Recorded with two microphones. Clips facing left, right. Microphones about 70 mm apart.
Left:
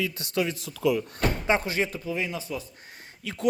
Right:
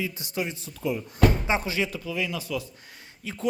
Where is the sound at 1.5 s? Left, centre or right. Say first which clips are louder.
Left 1 dB; left.